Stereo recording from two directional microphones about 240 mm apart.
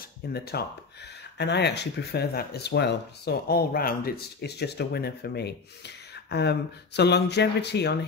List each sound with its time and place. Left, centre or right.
0.3 s speech: left